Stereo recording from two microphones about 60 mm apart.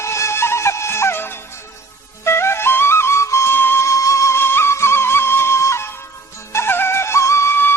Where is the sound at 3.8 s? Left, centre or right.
Left.